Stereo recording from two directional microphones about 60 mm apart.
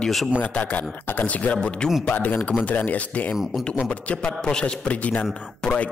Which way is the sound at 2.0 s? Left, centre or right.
Left.